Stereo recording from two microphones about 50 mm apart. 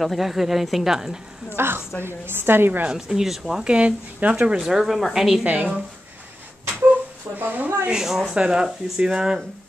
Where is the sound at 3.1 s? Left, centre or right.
Centre.